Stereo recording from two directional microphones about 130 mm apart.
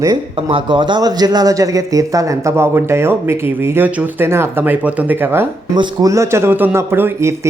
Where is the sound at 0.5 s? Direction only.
40° right (ahead or behind); by 5.5 s 15° right (ahead or behind).